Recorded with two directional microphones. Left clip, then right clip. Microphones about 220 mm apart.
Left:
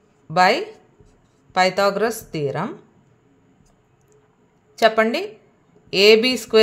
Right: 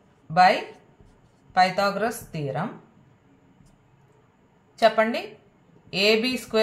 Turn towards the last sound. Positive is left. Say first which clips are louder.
# left 8 dB
turn(degrees=55)  # may be behind; listen again after turning